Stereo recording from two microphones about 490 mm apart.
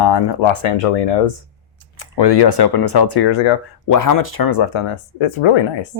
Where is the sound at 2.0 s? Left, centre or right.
Left.